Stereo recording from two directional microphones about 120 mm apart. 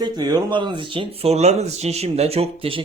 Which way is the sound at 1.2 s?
65° right (ahead or behind).